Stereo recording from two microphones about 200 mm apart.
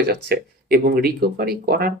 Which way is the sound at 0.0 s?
55° right (ahead or behind).